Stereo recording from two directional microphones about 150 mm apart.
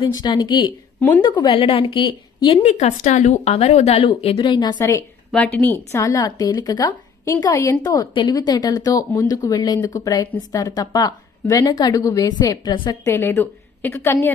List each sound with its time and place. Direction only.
0.0 s speech: 25° left (ahead or behind)
13.0 s a woman's voice: 15° left (ahead or behind)